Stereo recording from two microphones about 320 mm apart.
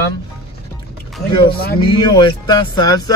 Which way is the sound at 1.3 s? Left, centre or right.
Centre.